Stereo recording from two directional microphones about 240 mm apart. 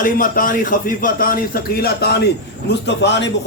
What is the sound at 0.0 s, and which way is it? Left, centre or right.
A man's voice, left.